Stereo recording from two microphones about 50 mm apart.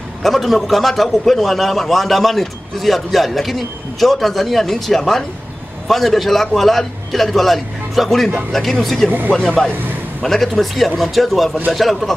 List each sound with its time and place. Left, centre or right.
0.2 s a man's voice: centre
10.2 s a man's voice: centre